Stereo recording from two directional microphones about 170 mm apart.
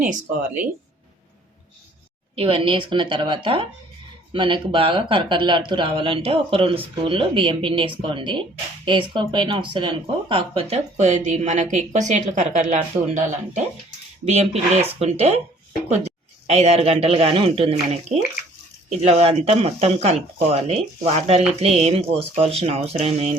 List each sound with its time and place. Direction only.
0.0 s speech: 10° right (ahead or behind)
2.3 s speech: 30° right (ahead or behind)
14.3 s speech: 40° right (ahead or behind)
16.5 s speech: 40° right (ahead or behind)